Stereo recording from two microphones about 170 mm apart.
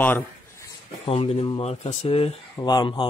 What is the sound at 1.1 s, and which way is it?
Speech, 35° left (ahead or behind).